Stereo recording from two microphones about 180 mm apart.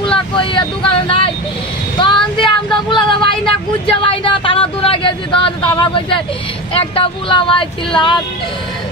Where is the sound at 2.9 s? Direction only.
30° left (ahead or behind).